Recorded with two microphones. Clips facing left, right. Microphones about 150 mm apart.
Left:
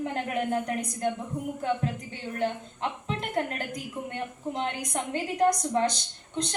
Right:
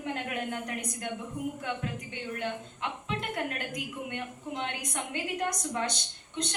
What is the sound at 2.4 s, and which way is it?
A woman's voice, 35° left (ahead or behind).